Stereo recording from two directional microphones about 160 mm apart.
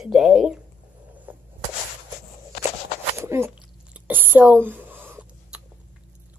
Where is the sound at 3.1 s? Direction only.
15° right (ahead or behind).